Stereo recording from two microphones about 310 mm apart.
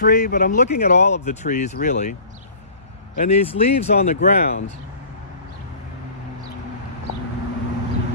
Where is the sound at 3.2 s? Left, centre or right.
Left.